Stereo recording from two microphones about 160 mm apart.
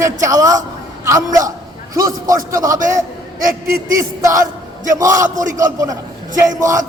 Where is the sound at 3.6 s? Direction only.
60° right (ahead or behind).